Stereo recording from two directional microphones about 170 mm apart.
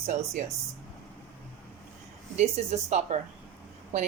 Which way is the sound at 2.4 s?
40° right (ahead or behind).